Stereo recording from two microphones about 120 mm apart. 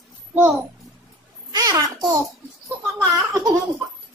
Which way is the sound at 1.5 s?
30° right (ahead or behind).